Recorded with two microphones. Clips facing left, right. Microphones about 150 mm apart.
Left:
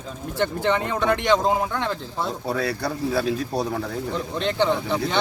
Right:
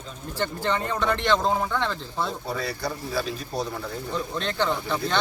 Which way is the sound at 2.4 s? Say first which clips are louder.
Left 4 dB; 70° left (ahead or behind).